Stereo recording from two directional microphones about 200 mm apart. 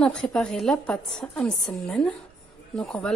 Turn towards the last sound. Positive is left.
turn(degrees=5)  # may be behind; listen again after turning